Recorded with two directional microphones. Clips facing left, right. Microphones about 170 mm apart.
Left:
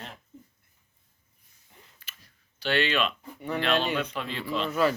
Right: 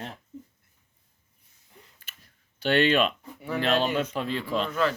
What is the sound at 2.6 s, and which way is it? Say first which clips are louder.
Speech: right 4 dB; 50° right (ahead or behind).